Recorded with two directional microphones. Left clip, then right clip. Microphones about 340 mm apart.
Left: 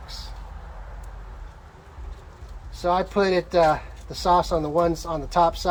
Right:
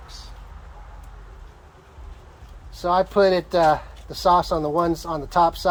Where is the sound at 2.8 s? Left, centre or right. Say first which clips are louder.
Right 3 dB; centre.